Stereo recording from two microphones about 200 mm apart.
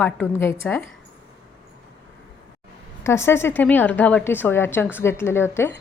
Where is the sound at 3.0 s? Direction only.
15° left (ahead or behind).